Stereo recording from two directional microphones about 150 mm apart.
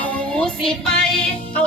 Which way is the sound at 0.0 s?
10° left (ahead or behind).